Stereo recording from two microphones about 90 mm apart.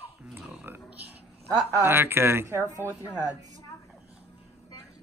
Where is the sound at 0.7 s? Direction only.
20° right (ahead or behind).